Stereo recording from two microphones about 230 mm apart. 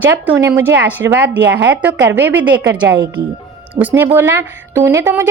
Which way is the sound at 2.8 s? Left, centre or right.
Right.